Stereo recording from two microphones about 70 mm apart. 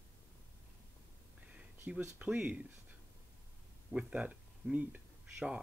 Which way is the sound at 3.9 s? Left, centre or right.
Centre.